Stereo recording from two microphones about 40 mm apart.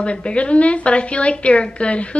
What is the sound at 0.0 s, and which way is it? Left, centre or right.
A woman's voice, left.